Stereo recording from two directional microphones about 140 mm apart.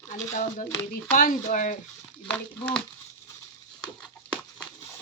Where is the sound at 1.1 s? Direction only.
75° left (ahead or behind).